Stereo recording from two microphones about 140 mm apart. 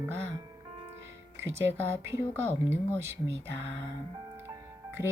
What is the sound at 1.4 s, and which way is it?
Music, 20° right (ahead or behind).